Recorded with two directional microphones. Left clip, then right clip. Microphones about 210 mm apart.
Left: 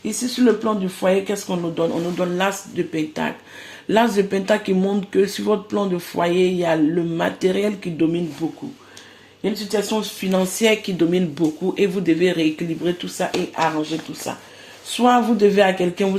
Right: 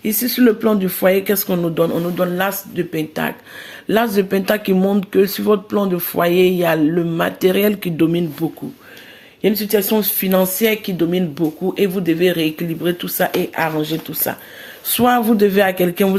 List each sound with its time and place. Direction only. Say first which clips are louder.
0.0 s speech: right 3 dB; 45° right (ahead or behind)
9.4 s speech: right 6 dB; 50° right (ahead or behind)
14.9 s speech: right 2 dB; 40° right (ahead or behind)